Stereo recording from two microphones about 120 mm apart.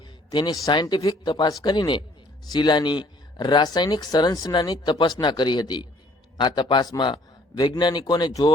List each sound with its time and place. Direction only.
0.0 s speech: 40° left (ahead or behind)